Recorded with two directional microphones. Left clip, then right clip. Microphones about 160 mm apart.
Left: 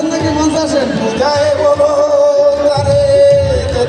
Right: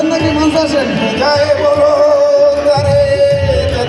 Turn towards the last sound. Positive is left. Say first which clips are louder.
# left 2 dB
turn(degrees=60)  # may be behind; listen again after turning